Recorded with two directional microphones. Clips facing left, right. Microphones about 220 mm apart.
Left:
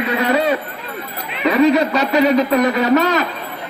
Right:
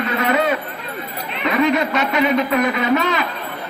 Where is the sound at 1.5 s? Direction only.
35° left (ahead or behind).